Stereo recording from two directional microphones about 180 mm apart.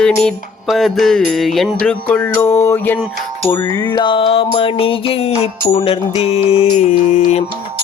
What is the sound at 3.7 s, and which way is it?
Mantra, 25° left (ahead or behind).